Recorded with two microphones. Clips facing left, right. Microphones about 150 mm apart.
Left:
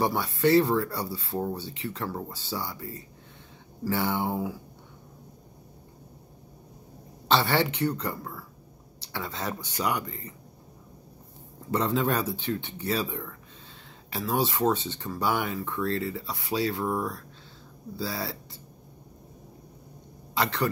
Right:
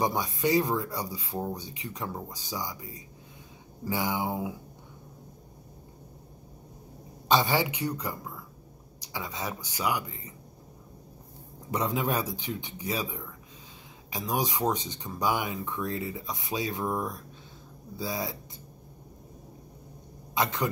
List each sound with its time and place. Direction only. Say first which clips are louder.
0.0 s speech: left 3 dB; 15° right (ahead or behind)
7.2 s speech: left 1 dB; 15° right (ahead or behind)
11.7 s speech: left 3 dB; 10° right (ahead or behind)